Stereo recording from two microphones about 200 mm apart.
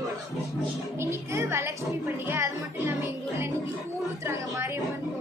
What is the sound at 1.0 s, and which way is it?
Music, 15° right (ahead or behind).